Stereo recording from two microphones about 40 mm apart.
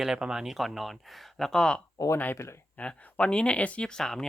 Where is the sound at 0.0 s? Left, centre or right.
Centre.